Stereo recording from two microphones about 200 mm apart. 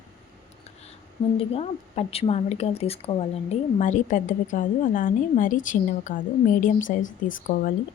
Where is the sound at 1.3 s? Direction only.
30° left (ahead or behind).